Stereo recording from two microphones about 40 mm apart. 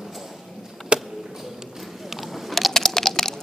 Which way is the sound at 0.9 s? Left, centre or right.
Right.